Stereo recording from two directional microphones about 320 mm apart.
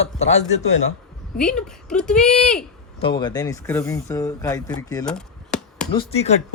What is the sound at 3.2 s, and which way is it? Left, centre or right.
Speech, centre.